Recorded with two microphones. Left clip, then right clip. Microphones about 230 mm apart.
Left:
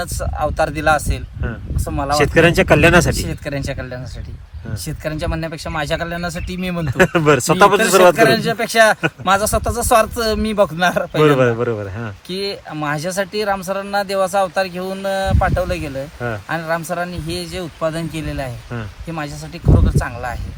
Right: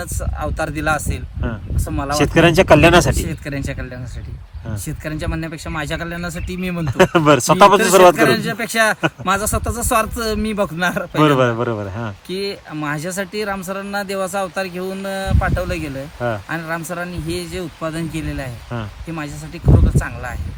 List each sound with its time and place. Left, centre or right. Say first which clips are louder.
0.0 s speech: left 5 dB; centre
2.6 s a man's voice: right 2 dB; right
3.2 s speech: left 2 dB; centre
6.8 s a man's voice: right 1 dB; right
8.1 s speech: left 2 dB; centre
11.2 s a man's voice: left 1 dB; right
12.3 s speech: left 2 dB; centre